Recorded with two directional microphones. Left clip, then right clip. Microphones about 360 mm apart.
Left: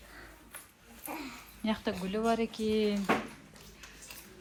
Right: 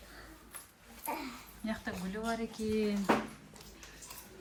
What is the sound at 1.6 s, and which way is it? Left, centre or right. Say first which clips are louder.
Speech: left 6 dB; centre.